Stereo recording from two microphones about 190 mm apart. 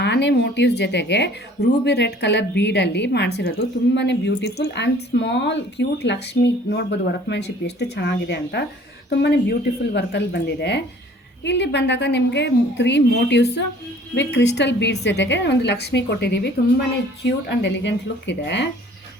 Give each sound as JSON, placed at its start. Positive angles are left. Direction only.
{"t": 0.0, "sound": "speech", "side_deg": 65}